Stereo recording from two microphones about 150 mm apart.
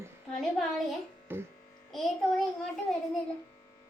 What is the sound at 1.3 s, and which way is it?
Speech, 15° right (ahead or behind).